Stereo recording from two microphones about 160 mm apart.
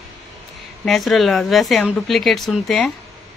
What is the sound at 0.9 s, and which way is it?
A woman's voice, centre (ahead or behind).